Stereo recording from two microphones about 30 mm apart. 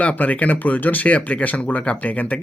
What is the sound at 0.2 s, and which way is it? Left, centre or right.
Speech, left.